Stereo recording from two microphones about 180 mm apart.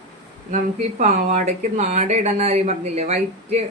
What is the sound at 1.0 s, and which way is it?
Speech, 40° right (ahead or behind).